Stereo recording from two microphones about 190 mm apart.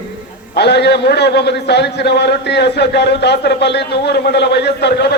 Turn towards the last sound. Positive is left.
turn(degrees=60)  # may be behind; listen again after turning